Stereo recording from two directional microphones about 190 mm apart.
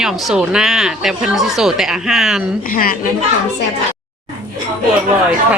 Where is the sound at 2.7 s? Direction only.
50° left (ahead or behind).